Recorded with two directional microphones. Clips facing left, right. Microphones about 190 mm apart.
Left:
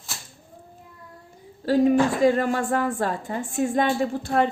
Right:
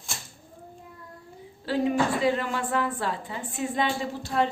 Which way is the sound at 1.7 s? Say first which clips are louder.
Left 6 dB; 45° left (ahead or behind).